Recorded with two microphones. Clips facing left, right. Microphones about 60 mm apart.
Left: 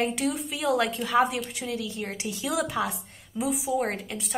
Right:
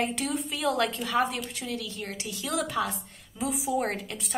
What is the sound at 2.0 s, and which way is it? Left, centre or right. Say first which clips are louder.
Speech: left 3 dB; left.